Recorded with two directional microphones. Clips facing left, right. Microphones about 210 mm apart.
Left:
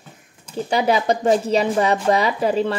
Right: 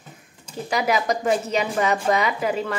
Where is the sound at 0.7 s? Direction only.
30° left (ahead or behind).